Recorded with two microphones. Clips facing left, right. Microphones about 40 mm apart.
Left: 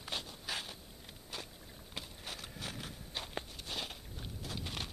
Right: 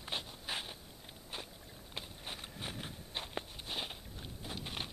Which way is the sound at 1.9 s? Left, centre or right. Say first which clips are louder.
Even; centre.